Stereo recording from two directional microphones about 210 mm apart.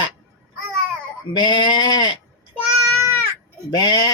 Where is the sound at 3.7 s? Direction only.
20° left (ahead or behind).